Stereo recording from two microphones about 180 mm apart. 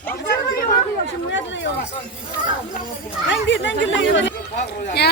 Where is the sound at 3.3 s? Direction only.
90° left.